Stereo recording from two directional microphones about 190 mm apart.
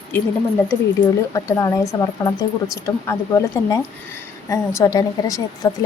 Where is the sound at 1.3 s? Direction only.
15° left (ahead or behind).